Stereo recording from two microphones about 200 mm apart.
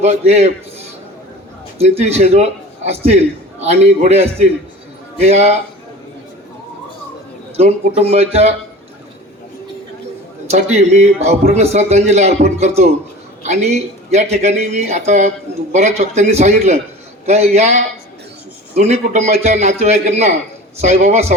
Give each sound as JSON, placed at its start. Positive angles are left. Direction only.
{"t": 0.0, "sound": "a man's voice", "side_deg": -35}
{"t": 1.8, "sound": "a man's voice", "side_deg": -30}
{"t": 7.5, "sound": "a man's voice", "side_deg": -30}
{"t": 10.5, "sound": "a man's voice", "side_deg": -35}